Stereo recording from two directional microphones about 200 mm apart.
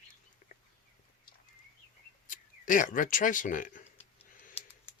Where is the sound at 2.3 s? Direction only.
40° left (ahead or behind).